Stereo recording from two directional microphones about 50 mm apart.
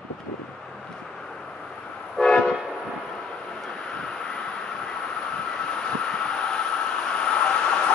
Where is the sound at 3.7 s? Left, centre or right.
Centre.